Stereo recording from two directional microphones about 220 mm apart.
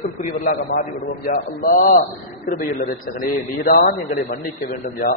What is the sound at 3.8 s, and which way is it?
A man's voice, 40° left (ahead or behind).